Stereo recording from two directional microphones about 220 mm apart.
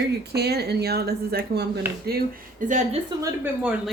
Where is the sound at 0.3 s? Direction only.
45° right (ahead or behind).